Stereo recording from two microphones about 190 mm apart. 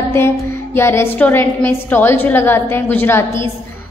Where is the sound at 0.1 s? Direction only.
15° left (ahead or behind).